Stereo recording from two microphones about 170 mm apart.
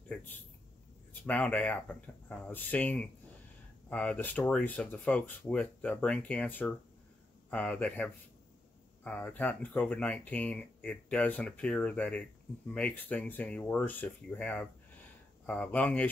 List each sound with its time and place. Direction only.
1.2 s speech: 10° left (ahead or behind)